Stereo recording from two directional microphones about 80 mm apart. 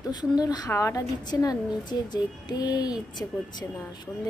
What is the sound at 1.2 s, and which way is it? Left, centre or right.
Speech, left.